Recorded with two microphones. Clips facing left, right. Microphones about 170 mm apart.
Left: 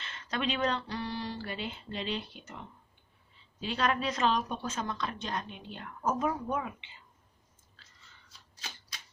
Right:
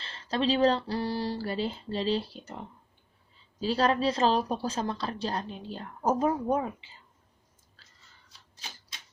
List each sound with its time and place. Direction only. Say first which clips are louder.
0.0 s a woman's voice: right 5 dB; 30° right (ahead or behind)